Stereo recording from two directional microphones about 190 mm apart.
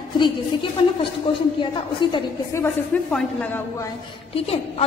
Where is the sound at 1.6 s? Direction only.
25° left (ahead or behind).